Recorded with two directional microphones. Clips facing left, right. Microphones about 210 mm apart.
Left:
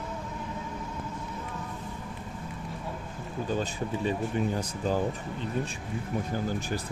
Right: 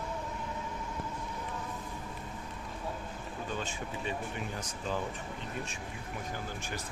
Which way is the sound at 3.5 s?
35° left (ahead or behind).